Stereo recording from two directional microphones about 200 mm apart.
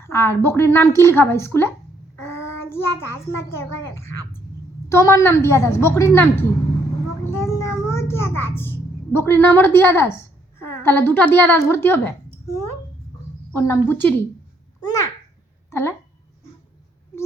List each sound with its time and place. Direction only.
0.0 s a woman's voice: 10° left (ahead or behind)
13.5 s a woman's voice: 15° left (ahead or behind)
14.8 s babbling: 15° left (ahead or behind)
15.7 s a sound: 15° left (ahead or behind)